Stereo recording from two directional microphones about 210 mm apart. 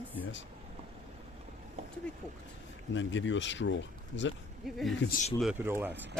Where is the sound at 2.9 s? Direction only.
60° left (ahead or behind).